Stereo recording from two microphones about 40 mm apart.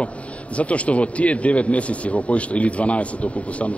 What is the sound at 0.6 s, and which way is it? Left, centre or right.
Speech, left.